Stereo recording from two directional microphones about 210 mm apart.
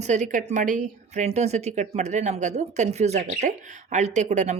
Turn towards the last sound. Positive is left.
turn(degrees=-35)  # may be behind; listen again after turning